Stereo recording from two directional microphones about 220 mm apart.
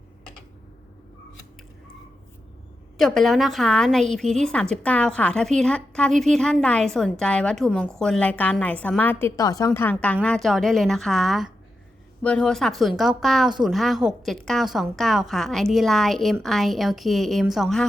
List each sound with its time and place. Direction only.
3.0 s a woman's voice: centre (ahead or behind)